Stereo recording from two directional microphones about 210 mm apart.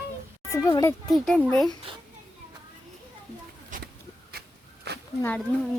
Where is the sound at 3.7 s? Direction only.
40° right (ahead or behind).